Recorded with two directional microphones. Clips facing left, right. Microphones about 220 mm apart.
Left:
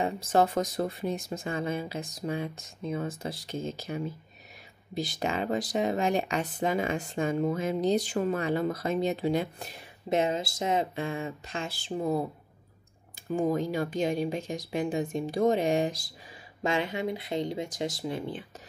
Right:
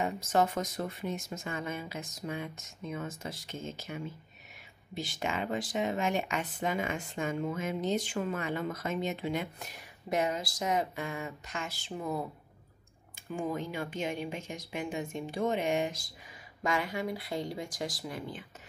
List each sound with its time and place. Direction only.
0.0 s speech: 35° left (ahead or behind)
16.6 s speech: 25° left (ahead or behind)